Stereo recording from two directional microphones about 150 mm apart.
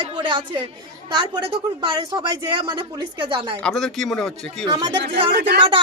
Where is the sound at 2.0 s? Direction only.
35° right (ahead or behind).